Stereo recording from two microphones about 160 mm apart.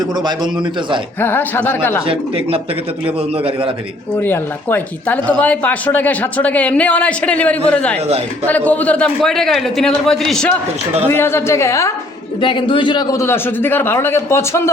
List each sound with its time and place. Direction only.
1.2 s speech: 10° left (ahead or behind)
4.2 s a man's voice: 10° left (ahead or behind)
11.1 s speech: 15° left (ahead or behind)
12.4 s speech: 30° left (ahead or behind); by 14.7 s 15° left (ahead or behind)